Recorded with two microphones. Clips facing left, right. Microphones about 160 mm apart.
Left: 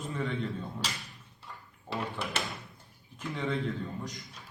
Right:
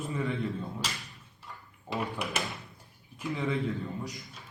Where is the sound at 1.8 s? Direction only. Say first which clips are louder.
Right 2 dB; 15° right (ahead or behind).